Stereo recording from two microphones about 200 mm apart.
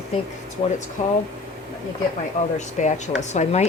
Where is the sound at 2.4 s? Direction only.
35° left (ahead or behind).